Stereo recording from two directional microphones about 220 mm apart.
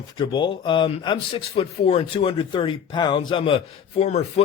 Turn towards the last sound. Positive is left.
turn(degrees=30)  # may be behind; listen again after turning